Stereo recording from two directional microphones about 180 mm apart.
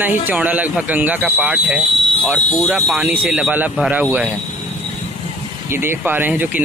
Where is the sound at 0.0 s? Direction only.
10° right (ahead or behind).